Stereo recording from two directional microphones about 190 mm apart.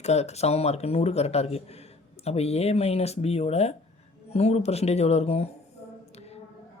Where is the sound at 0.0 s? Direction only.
35° left (ahead or behind).